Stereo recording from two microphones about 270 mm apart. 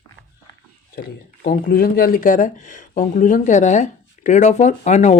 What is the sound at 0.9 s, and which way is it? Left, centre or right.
Speech, left.